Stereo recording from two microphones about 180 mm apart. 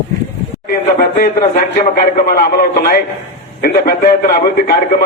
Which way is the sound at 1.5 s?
50° left (ahead or behind).